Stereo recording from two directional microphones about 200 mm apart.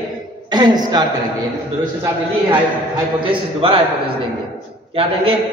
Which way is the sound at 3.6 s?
25° right (ahead or behind).